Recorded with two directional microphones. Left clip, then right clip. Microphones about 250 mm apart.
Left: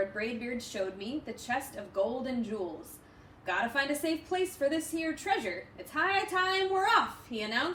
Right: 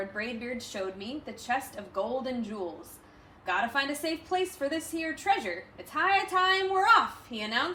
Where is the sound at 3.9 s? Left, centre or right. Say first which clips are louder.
Right 1 dB; centre.